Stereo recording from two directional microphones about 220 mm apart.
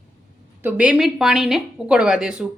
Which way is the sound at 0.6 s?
5° right (ahead or behind).